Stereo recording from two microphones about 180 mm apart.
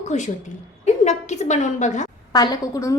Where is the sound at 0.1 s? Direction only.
40° left (ahead or behind).